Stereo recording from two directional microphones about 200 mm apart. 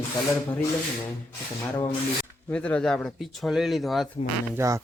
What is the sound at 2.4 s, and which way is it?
Speech, 5° left (ahead or behind).